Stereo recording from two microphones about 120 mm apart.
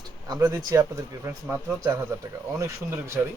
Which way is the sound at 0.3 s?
30° right (ahead or behind).